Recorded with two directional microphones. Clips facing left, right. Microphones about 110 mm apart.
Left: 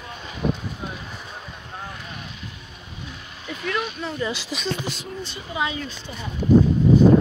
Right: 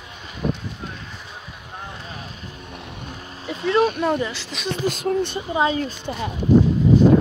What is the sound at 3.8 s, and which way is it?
Speech, 55° right (ahead or behind).